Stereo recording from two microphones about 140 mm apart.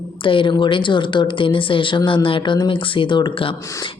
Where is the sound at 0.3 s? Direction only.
35° left (ahead or behind).